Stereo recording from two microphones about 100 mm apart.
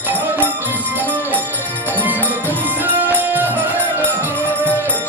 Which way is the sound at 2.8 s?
20° right (ahead or behind).